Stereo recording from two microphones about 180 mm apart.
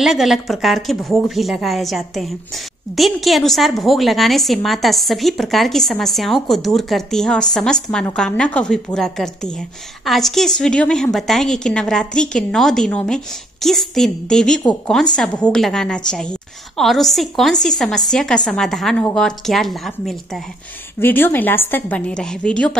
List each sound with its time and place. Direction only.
0.0 s a woman's voice: centre (ahead or behind)
21.0 s a woman's voice: 10° left (ahead or behind)